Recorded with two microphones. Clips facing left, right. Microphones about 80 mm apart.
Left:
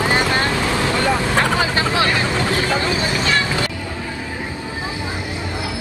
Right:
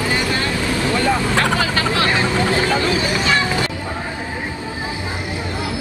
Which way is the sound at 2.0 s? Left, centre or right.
Right.